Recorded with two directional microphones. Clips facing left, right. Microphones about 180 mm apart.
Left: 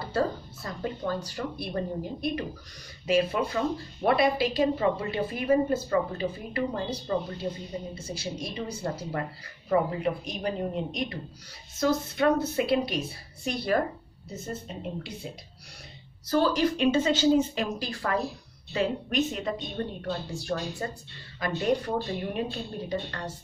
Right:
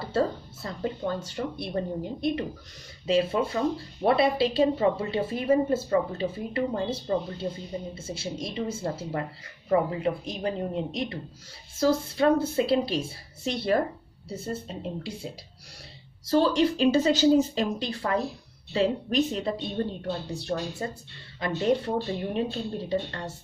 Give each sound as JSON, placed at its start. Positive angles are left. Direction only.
{"t": 0.0, "sound": "speech", "side_deg": -25}
{"t": 16.3, "sound": "speech", "side_deg": -25}